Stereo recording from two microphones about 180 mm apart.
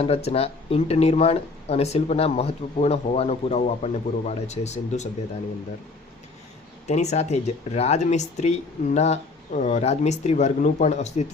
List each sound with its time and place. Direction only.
0.0 s speech: 35° left (ahead or behind)
6.8 s speech: 40° left (ahead or behind)